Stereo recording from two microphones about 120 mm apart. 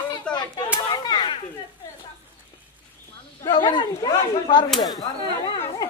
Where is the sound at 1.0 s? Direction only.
40° left (ahead or behind).